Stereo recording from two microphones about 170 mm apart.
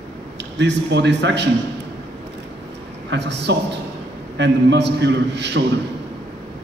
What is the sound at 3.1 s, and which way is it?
A man's voice, 90° right.